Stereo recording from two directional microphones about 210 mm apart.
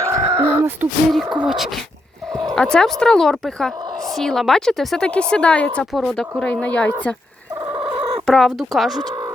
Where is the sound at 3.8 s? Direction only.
20° right (ahead or behind).